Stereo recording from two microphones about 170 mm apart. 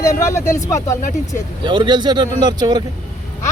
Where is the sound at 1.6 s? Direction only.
30° right (ahead or behind).